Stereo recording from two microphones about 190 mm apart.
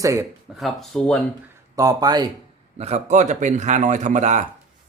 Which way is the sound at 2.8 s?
35° right (ahead or behind).